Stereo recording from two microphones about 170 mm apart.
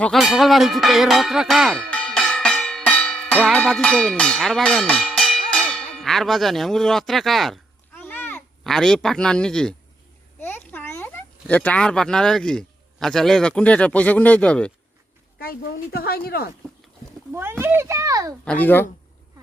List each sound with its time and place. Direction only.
0.0 s music: centre (ahead or behind)
8.0 s a sound: 10° left (ahead or behind)
8.6 s speech: 5° left (ahead or behind)
15.4 s speech: 60° left (ahead or behind)
17.3 s a child's voice: 15° right (ahead or behind)
18.4 s speech: 10° left (ahead or behind)